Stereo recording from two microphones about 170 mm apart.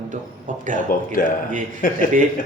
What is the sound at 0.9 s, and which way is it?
Speech, 55° left (ahead or behind).